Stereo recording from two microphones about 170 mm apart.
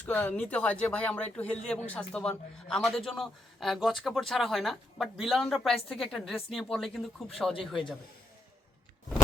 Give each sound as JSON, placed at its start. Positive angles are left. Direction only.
{"t": 0.0, "sound": "a man's voice", "side_deg": 10}